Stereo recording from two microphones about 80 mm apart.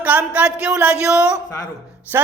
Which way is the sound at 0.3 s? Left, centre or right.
Centre.